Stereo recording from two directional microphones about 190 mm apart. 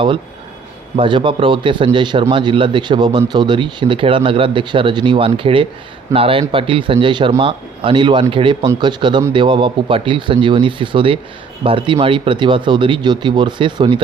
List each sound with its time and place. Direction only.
0.9 s a man's voice: 25° right (ahead or behind)